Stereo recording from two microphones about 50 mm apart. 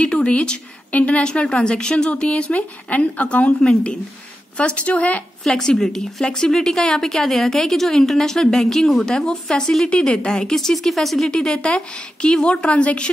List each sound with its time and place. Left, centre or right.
0.0 s a woman's voice: left
5.4 s a woman's voice: centre